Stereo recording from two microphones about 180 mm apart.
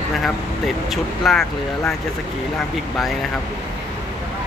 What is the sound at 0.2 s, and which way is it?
Speech, centre (ahead or behind).